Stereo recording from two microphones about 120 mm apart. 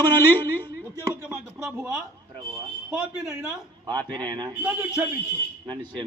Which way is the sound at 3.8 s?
35° right (ahead or behind).